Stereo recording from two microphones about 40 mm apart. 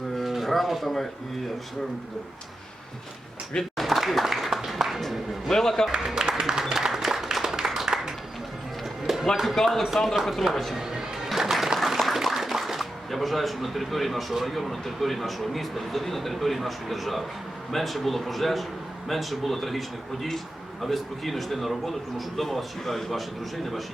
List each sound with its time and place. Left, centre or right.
0.2 s a sound: centre
3.6 s a sound: centre
5.5 s speech: centre
5.9 s speech: centre
6.4 s a sound: centre
9.2 s a man's voice: centre
10.8 s music: centre
11.8 s a man's voice: centre
20.8 s a man's voice: centre